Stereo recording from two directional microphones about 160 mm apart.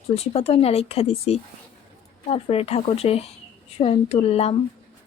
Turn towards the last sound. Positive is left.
turn(degrees=40)  # may be behind; listen again after turning